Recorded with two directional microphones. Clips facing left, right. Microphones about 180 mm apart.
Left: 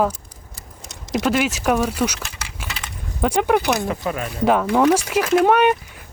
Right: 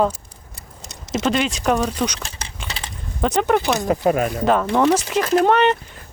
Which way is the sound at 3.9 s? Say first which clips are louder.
Right 7 dB; 40° right (ahead or behind).